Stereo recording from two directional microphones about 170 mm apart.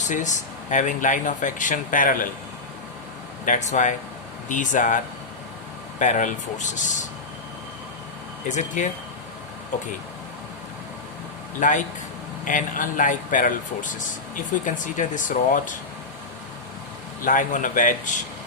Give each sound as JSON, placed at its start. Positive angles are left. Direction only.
{"t": 0.0, "sound": "speech", "side_deg": 45}
{"t": 3.4, "sound": "speech", "side_deg": 45}
{"t": 6.0, "sound": "speech", "side_deg": 50}
{"t": 8.4, "sound": "speech", "side_deg": 45}
{"t": 11.6, "sound": "speech", "side_deg": 50}
{"t": 17.2, "sound": "speech", "side_deg": 50}